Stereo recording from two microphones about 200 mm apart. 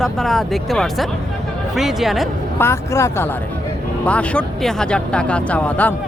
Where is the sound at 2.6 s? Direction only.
15° left (ahead or behind).